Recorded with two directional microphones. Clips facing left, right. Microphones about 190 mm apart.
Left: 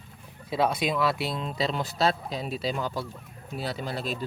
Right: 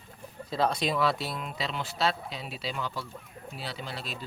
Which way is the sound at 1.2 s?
20° left (ahead or behind).